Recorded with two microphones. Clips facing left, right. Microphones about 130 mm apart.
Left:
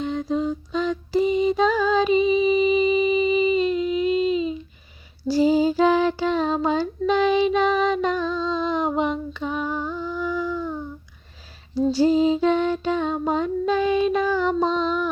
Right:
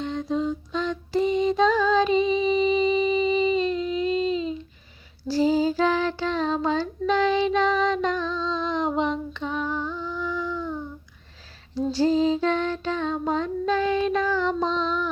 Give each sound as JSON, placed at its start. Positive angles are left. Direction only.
{"t": 0.0, "sound": "mantra", "side_deg": 5}
{"t": 5.3, "sound": "female singing", "side_deg": 15}
{"t": 11.7, "sound": "lullaby", "side_deg": 10}